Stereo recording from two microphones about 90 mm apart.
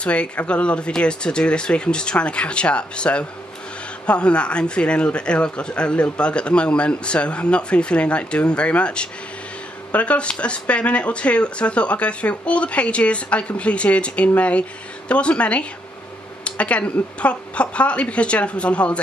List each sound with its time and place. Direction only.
0.0 s speech: 15° left (ahead or behind)